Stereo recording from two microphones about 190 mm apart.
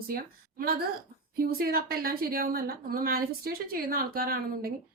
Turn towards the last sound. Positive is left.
turn(degrees=-50)  # may be behind; listen again after turning